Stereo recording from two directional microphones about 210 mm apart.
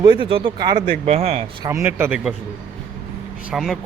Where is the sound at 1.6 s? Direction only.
10° right (ahead or behind).